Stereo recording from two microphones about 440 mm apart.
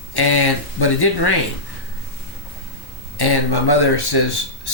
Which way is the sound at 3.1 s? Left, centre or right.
Left.